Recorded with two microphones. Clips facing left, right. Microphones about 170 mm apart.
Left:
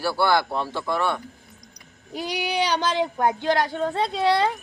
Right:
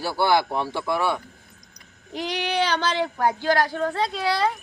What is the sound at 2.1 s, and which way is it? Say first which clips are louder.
Speech: right 1 dB; 10° left (ahead or behind).